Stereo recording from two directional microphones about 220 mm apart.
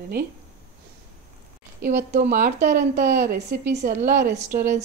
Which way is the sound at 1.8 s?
45° right (ahead or behind).